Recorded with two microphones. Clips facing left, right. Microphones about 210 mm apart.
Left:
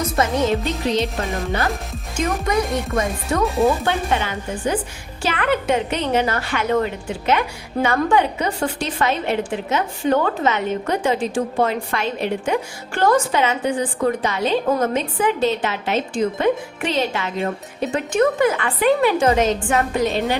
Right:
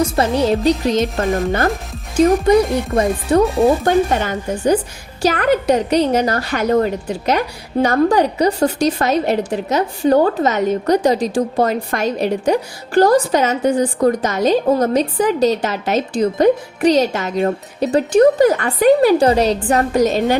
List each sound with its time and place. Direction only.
0.0 s a woman's voice: 35° right (ahead or behind); by 1.7 s 50° right (ahead or behind)
2.1 s a woman's voice: 30° right (ahead or behind)
3.8 s a woman's voice: 45° right (ahead or behind)